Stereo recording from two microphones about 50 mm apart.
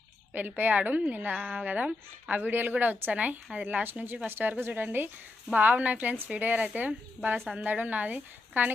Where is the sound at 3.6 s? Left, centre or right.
Right.